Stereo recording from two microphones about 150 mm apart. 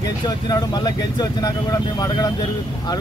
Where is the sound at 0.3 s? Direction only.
25° left (ahead or behind).